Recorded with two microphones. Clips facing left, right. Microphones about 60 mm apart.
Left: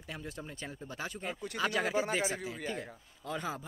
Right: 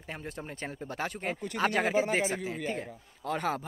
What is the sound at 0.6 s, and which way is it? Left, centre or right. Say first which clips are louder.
Speech: right 7 dB; right.